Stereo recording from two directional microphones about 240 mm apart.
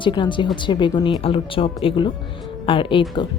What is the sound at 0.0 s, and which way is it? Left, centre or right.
A woman's voice, centre.